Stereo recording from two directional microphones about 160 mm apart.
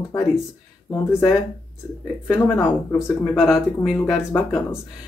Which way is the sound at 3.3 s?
Centre (ahead or behind).